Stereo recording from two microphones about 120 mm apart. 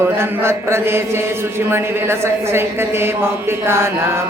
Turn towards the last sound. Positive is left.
turn(degrees=-20)  # may be behind; listen again after turning